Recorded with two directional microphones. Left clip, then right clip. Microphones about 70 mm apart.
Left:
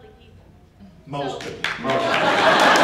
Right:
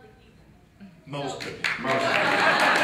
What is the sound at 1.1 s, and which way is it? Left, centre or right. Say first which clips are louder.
Speech: left 5 dB; left.